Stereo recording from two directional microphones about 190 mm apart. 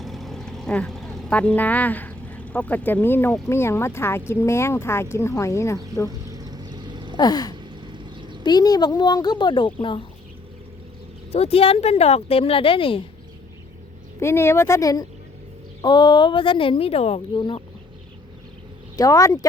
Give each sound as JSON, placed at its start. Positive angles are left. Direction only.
{"t": 0.0, "sound": "vehicle", "side_deg": 0}
{"t": 3.5, "sound": "speech", "side_deg": 15}
{"t": 6.1, "sound": "vehicle", "side_deg": -20}
{"t": 7.2, "sound": "speech", "side_deg": 20}
{"t": 7.6, "sound": "a sound", "side_deg": -25}
{"t": 8.4, "sound": "speech", "side_deg": 20}
{"t": 11.3, "sound": "speech", "side_deg": 30}
{"t": 14.2, "sound": "speech", "side_deg": 15}
{"t": 18.9, "sound": "speech", "side_deg": 20}